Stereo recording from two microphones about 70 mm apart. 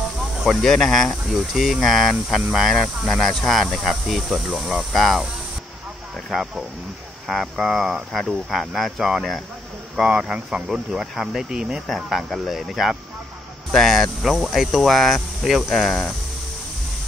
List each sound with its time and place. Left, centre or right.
0.4 s speech: centre
6.3 s speech: centre
11.9 s speech: centre